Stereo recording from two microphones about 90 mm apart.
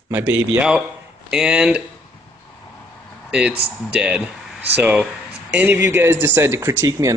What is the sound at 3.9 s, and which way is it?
A man's voice, 15° right (ahead or behind).